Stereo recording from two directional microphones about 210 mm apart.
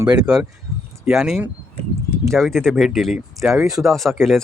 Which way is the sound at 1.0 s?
Centre (ahead or behind).